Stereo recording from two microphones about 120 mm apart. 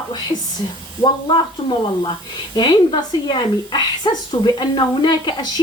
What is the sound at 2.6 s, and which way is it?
A woman's voice, 35° left (ahead or behind).